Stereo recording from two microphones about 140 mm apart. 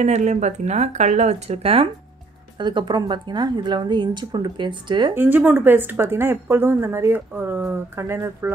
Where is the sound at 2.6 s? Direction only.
30° right (ahead or behind).